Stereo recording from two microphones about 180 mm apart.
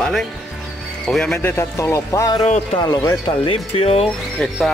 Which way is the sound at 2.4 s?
40° left (ahead or behind).